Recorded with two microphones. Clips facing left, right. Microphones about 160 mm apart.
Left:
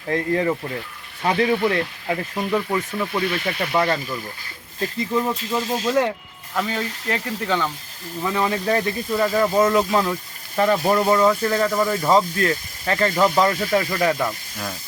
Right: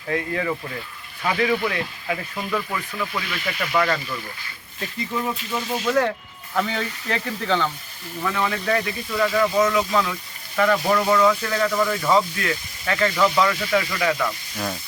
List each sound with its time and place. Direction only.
0.1 s speech: 30° left (ahead or behind)
5.4 s speech: 30° left (ahead or behind)
6.5 s speech: 5° left (ahead or behind)
8.2 s speech: 30° left (ahead or behind)